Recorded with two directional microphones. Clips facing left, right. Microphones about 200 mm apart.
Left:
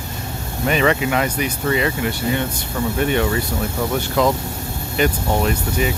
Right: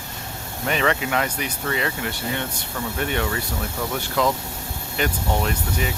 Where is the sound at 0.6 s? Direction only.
10° left (ahead or behind).